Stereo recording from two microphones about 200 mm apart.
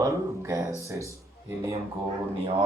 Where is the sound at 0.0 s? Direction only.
15° right (ahead or behind).